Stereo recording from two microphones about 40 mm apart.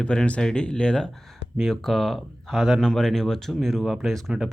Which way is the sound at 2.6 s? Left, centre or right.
Centre.